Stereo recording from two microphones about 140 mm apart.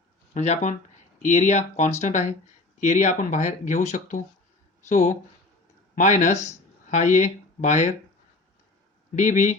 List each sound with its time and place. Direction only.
0.3 s speech: 55° left (ahead or behind)
9.1 s speech: 60° left (ahead or behind)